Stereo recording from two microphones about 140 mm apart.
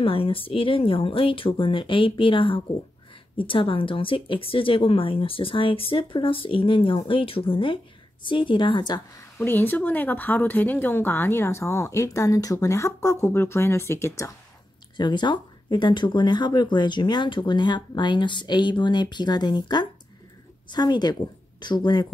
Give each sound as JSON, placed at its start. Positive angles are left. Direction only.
{"t": 0.0, "sound": "speech", "side_deg": 40}
{"t": 9.4, "sound": "speech", "side_deg": 15}
{"t": 15.0, "sound": "a woman's voice", "side_deg": 30}